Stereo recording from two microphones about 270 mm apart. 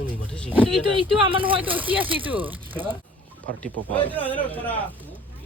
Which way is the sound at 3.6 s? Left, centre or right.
Centre.